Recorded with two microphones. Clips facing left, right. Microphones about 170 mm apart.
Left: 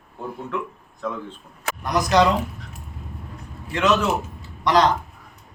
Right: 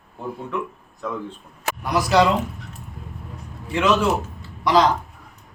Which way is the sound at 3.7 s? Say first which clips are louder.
Right 1 dB; 10° right (ahead or behind).